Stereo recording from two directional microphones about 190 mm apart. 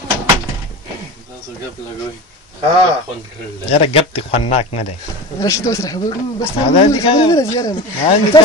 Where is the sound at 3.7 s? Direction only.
30° left (ahead or behind).